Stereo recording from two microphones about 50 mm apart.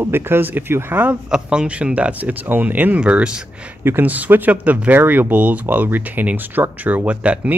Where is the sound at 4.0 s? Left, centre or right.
Right.